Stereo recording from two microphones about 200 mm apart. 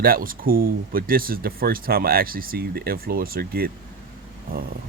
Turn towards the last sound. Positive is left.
turn(degrees=-45)  # may be behind; listen again after turning